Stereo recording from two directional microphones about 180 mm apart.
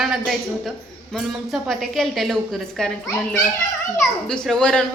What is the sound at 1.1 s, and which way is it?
A woman's voice, centre (ahead or behind).